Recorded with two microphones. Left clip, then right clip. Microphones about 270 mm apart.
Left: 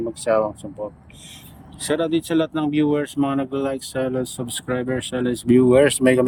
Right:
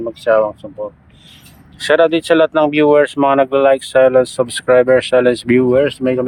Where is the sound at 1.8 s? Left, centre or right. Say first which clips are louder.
Right 10 dB; centre.